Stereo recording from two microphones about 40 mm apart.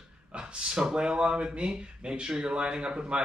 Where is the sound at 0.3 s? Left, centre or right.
Right.